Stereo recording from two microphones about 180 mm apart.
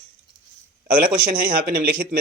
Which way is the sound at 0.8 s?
50° right (ahead or behind).